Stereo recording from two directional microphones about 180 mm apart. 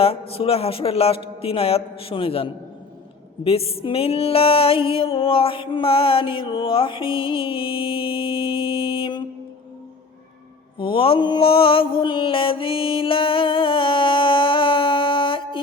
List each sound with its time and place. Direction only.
0.0 s speech: 30° left (ahead or behind)
3.4 s music: 35° left (ahead or behind)
10.8 s mantra: 30° left (ahead or behind)